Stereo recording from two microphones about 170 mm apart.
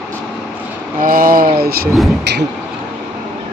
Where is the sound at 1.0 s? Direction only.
55° right (ahead or behind).